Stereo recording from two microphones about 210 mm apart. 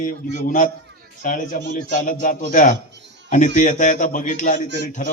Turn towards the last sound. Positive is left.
turn(degrees=35)  # may be behind; listen again after turning